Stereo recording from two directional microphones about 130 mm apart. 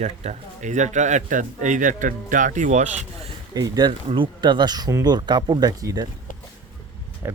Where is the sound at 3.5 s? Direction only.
30° right (ahead or behind).